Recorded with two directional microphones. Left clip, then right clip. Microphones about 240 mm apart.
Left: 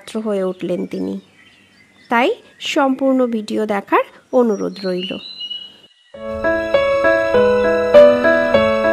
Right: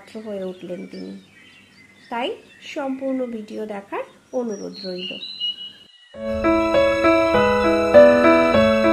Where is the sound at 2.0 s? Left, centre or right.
Left.